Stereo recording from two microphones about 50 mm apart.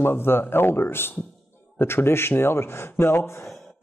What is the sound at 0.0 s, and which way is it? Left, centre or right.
Speech, left.